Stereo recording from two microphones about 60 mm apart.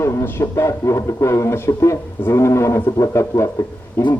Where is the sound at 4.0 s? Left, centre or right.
Left.